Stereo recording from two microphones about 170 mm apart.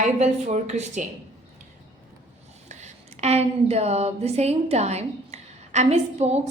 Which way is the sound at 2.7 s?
40° right (ahead or behind).